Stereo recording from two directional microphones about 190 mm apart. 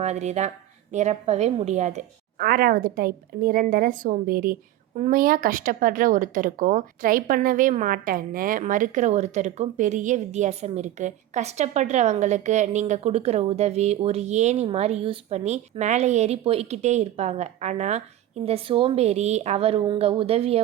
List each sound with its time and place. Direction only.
0.0 s a woman's voice: 35° right (ahead or behind)